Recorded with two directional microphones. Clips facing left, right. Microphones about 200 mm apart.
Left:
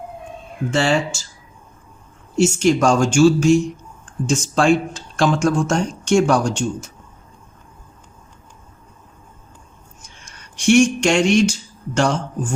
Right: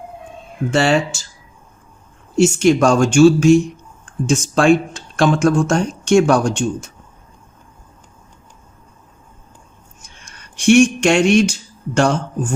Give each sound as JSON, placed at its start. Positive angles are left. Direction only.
{"t": 0.7, "sound": "speech", "side_deg": -60}
{"t": 2.4, "sound": "speech", "side_deg": -60}
{"t": 10.7, "sound": "speech", "side_deg": -55}